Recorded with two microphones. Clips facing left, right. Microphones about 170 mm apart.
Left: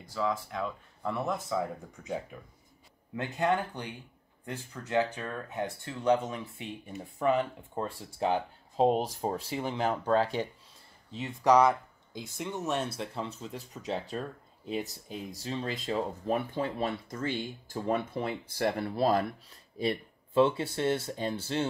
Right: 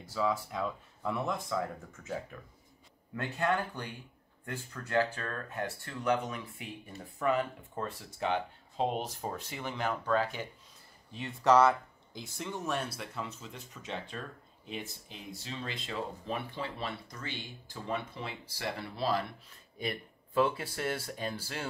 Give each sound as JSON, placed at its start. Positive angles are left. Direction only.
{"t": 0.1, "sound": "speech", "side_deg": -5}
{"t": 1.9, "sound": "speech", "side_deg": 15}
{"t": 11.1, "sound": "speech", "side_deg": 15}
{"t": 19.8, "sound": "speech", "side_deg": 30}